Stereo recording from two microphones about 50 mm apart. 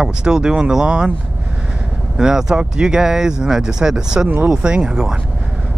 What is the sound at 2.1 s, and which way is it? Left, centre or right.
Speech, centre.